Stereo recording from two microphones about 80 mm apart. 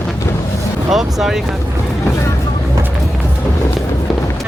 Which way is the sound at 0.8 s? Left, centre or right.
Centre.